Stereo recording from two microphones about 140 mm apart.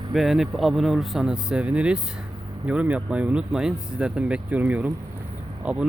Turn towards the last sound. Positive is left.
turn(degrees=-10)  # may be behind; listen again after turning